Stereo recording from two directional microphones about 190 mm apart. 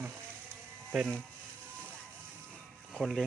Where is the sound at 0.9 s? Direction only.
Centre (ahead or behind).